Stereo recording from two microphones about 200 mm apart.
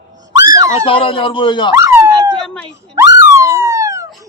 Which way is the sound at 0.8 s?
25° left (ahead or behind).